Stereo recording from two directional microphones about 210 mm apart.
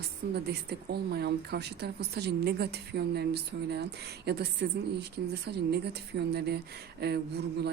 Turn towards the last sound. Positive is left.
turn(degrees=-50)  # may be behind; listen again after turning